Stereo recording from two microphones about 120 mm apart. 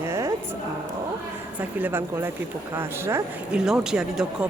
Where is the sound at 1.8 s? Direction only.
20° right (ahead or behind).